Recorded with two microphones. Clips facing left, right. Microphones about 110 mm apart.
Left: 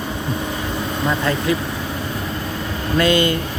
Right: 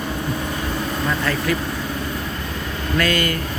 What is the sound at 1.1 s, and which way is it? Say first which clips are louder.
Speech: left 3 dB; 20° left (ahead or behind).